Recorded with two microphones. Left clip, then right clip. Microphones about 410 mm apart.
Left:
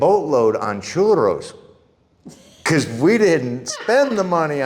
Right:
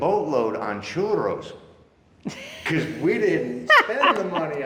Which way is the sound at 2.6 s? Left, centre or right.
Left.